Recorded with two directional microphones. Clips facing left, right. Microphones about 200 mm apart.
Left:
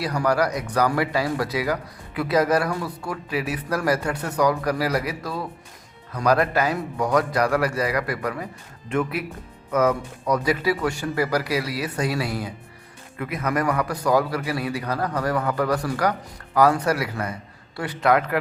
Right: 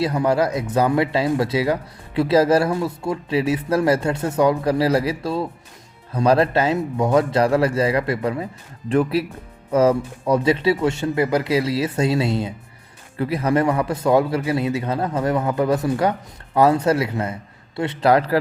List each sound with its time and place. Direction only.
0.0 s a man's voice: 25° right (ahead or behind)